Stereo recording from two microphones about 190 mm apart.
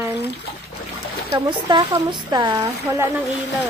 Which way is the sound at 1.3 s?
20° right (ahead or behind).